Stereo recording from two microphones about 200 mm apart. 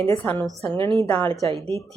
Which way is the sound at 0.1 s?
10° left (ahead or behind).